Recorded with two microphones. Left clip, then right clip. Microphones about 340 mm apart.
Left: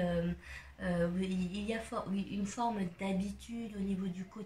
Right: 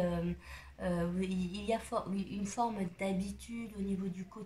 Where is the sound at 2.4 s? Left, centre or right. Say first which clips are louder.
Right 1 dB; centre.